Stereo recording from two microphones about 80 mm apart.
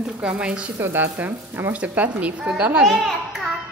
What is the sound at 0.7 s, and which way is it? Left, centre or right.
Speech, right.